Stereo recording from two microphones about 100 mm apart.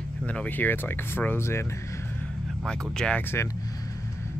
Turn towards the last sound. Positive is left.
turn(degrees=10)  # may be behind; listen again after turning